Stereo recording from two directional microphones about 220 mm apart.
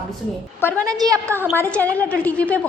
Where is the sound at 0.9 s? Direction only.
15° right (ahead or behind).